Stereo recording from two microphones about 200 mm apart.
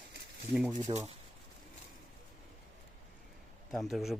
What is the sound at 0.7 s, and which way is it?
Speech, 35° right (ahead or behind).